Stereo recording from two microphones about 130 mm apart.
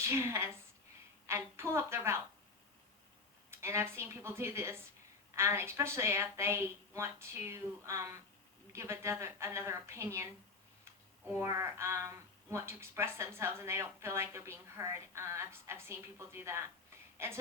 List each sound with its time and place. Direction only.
0.0 s a woman's voice: 20° right (ahead or behind)
3.5 s a woman's voice: 20° right (ahead or behind)
11.3 s a woman's voice: 20° right (ahead or behind)